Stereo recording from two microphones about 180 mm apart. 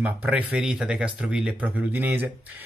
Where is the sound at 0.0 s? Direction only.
5° right (ahead or behind).